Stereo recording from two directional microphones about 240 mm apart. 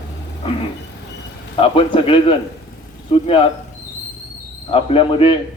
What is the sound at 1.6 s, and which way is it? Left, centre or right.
Speech, left.